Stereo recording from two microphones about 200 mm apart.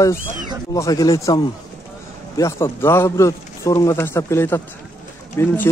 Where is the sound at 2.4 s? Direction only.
15° left (ahead or behind).